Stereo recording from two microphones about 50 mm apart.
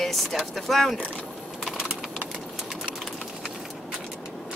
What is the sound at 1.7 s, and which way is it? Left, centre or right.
Typing, right.